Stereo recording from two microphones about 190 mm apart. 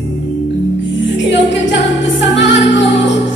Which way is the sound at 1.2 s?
70° left (ahead or behind).